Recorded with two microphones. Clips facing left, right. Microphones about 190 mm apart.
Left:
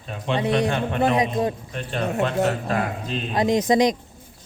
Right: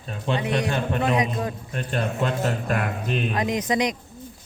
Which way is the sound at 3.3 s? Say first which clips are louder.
Left 9 dB; 25° left (ahead or behind).